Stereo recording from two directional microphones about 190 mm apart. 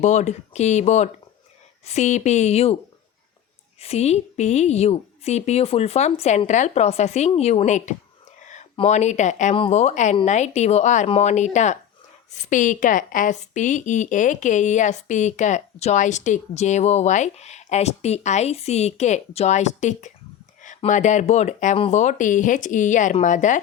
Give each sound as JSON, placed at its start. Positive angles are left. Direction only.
{"t": 0.0, "sound": "a woman's voice", "side_deg": 35}
{"t": 3.8, "sound": "a woman's voice", "side_deg": 35}